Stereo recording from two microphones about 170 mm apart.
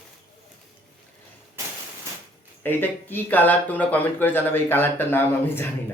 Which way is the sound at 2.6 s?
10° left (ahead or behind).